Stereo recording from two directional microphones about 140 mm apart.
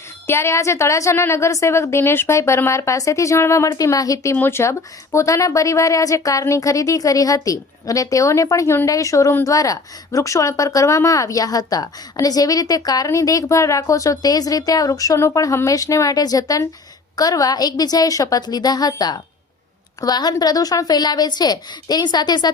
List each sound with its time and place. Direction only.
0.3 s a woman's voice: 20° left (ahead or behind)